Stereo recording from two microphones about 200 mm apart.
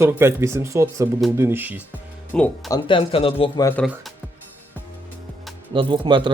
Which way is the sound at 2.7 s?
25° left (ahead or behind).